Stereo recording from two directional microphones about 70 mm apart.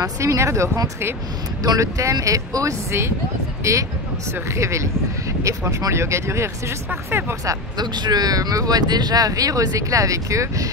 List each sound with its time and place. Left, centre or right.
0.0 s speech: right
7.4 s speech: right